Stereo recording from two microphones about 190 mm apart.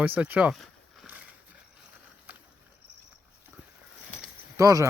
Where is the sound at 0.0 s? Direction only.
10° right (ahead or behind).